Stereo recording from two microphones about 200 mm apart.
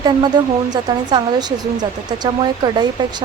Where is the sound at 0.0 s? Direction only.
20° right (ahead or behind).